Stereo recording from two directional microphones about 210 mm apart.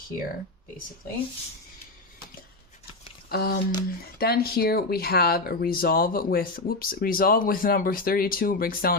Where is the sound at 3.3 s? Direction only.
45° left (ahead or behind).